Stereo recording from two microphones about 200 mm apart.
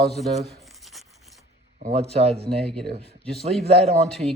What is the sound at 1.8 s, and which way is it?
Speech, 30° right (ahead or behind).